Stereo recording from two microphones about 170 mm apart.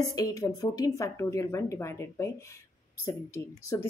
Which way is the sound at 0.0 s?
20° left (ahead or behind).